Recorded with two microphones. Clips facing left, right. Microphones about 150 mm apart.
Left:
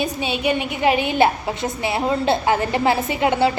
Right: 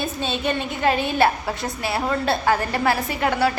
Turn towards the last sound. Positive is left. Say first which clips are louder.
# left 3 dB
turn(degrees=20)  # may be behind; listen again after turning